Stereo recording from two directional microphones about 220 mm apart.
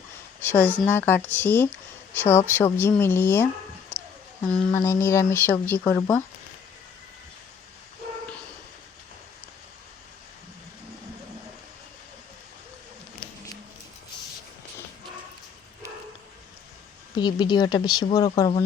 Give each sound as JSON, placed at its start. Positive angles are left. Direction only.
{"t": 0.6, "sound": "speech", "side_deg": -10}
{"t": 0.9, "sound": "speech", "side_deg": 10}
{"t": 17.2, "sound": "speech", "side_deg": 20}